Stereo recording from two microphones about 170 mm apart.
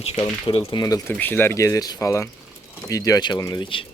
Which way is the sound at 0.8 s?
20° left (ahead or behind).